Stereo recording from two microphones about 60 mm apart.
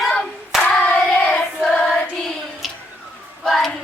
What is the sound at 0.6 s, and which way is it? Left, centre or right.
Hands, centre.